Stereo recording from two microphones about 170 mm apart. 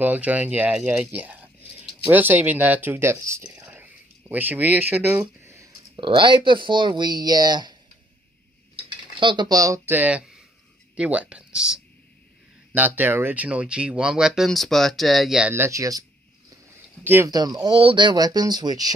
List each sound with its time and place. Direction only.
0.0 s speech: 10° right (ahead or behind)
3.6 s a sound: 10° right (ahead or behind)
5.9 s speech: 30° right (ahead or behind)
8.7 s speech: 30° right (ahead or behind)